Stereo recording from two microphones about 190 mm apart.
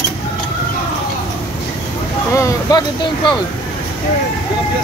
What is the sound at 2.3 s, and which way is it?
Speech, 20° left (ahead or behind).